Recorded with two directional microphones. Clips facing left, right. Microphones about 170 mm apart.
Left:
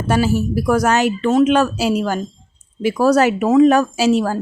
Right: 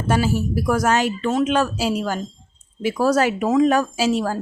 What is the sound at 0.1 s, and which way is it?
Speech, 70° left (ahead or behind).